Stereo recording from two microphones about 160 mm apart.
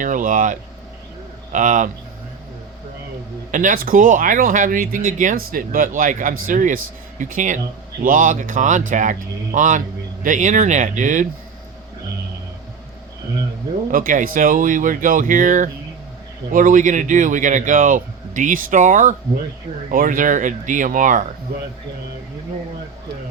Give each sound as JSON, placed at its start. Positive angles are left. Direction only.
{"t": 0.0, "sound": "speech", "side_deg": -55}
{"t": 3.5, "sound": "speech", "side_deg": -55}
{"t": 13.9, "sound": "speech", "side_deg": -60}